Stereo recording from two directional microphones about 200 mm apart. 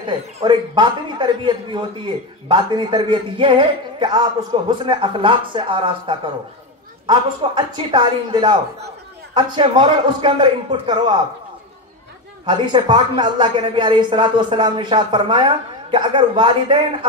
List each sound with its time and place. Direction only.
0.4 s speech: 20° right (ahead or behind)
12.4 s speech: 20° right (ahead or behind)